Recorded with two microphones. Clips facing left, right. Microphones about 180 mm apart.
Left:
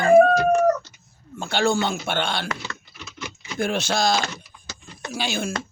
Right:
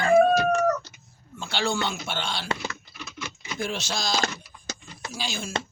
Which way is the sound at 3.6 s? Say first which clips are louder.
Left 8 dB; 55° left (ahead or behind).